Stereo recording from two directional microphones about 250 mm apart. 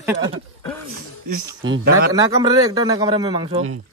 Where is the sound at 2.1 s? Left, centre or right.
Centre.